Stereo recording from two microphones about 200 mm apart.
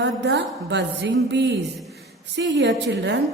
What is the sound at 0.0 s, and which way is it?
A woman's voice, 60° right (ahead or behind).